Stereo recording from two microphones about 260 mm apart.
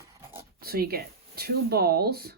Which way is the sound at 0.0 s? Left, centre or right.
Centre.